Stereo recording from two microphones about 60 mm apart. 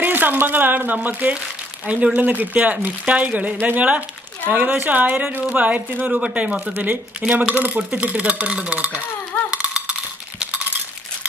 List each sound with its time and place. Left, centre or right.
0.0 s a woman's voice: right; by 8.7 s centre
8.7 s a woman's voice: right
9.5 s a sound: centre